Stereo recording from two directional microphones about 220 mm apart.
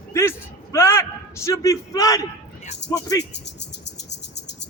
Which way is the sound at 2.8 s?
50° left (ahead or behind).